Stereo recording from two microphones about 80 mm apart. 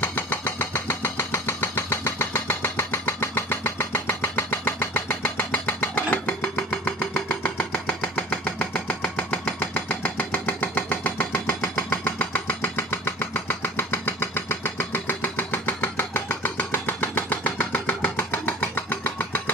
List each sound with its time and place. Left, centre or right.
0.0 s engine: left